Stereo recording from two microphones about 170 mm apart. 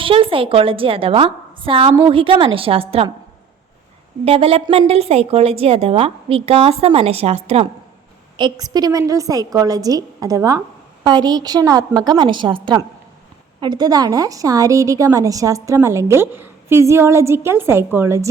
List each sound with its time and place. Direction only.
0.0 s a woman's voice: 30° right (ahead or behind)
4.3 s a woman's voice: 35° right (ahead or behind)
8.4 s a woman's voice: 25° right (ahead or behind)